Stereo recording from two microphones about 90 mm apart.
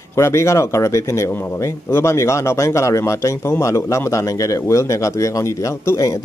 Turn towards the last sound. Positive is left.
turn(degrees=35)  # may be behind; listen again after turning